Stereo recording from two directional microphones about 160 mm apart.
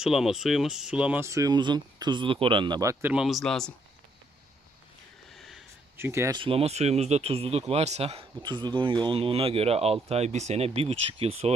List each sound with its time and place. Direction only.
0.0 s speech: centre (ahead or behind)
5.3 s a sound: centre (ahead or behind)
6.0 s speech: 15° right (ahead or behind)
6.3 s speech: 35° right (ahead or behind)
8.4 s speech: 30° right (ahead or behind)